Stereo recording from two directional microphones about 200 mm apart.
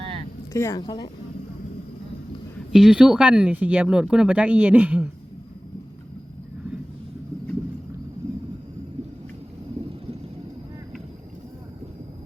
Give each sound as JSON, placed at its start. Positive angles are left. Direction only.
{"t": 0.5, "sound": "speech", "side_deg": 15}
{"t": 2.7, "sound": "speech", "side_deg": -5}